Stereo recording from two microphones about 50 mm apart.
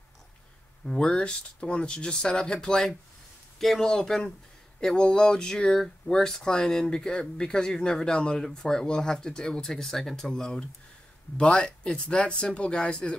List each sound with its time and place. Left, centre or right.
0.8 s speech: centre